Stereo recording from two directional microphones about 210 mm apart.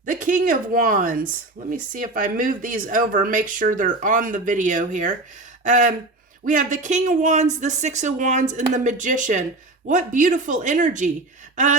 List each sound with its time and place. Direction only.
0.0 s speech: 40° right (ahead or behind)